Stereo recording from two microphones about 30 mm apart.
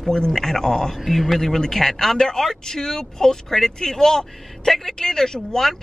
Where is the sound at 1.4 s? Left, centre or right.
Centre.